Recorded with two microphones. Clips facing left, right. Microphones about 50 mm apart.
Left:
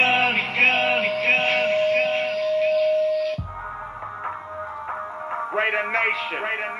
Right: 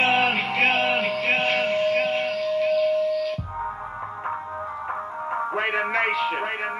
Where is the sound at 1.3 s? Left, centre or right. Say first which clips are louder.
Left 2 dB; left.